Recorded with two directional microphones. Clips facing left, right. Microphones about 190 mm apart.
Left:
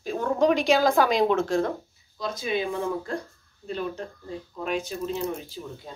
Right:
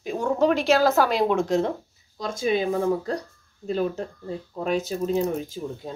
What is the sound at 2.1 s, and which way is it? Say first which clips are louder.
Speech: right 4 dB; 45° right (ahead or behind).